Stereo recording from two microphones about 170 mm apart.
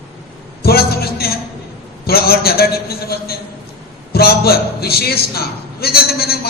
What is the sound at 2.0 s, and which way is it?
A man's voice, 65° left (ahead or behind).